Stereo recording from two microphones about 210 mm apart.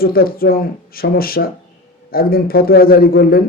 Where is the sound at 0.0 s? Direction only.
45° left (ahead or behind).